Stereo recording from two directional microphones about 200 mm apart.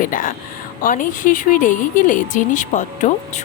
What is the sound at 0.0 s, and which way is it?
Speech, 45° left (ahead or behind).